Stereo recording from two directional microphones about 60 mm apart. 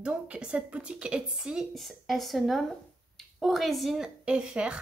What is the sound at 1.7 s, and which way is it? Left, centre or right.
A woman's voice, centre.